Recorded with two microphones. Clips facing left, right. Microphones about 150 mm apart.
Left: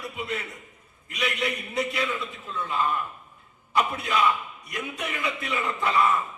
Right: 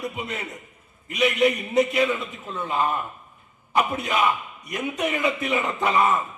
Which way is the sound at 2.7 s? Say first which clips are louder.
Right 3 dB; 45° right (ahead or behind).